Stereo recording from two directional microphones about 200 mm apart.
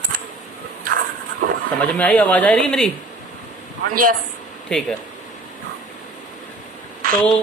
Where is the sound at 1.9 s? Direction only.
5° left (ahead or behind).